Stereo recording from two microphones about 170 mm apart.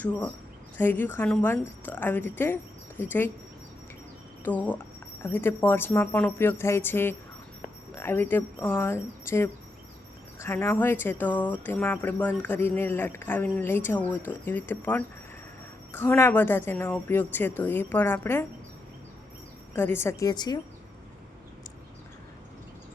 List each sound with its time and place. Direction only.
0.0 s speech: 10° left (ahead or behind)
4.4 s speech: 10° left (ahead or behind)
19.7 s speech: 15° left (ahead or behind)